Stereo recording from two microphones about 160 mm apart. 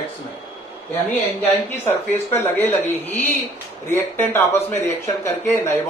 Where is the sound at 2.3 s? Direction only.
15° left (ahead or behind).